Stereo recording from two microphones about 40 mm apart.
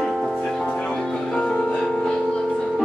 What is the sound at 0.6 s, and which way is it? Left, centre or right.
Music, left.